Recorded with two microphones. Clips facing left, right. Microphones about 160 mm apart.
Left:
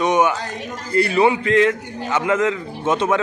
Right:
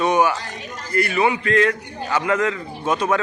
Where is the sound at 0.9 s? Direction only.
30° left (ahead or behind).